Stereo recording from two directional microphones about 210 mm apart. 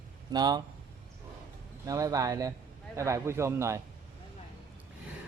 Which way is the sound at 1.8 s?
15° right (ahead or behind).